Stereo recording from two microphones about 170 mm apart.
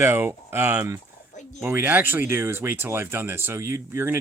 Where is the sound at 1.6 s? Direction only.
10° right (ahead or behind).